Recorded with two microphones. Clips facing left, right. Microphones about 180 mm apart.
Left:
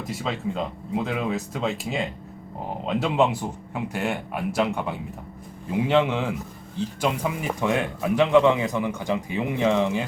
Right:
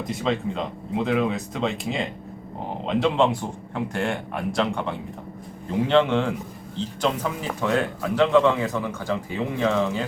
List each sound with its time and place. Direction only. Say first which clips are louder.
0.1 s speech: right 3 dB; 5° left (ahead or behind)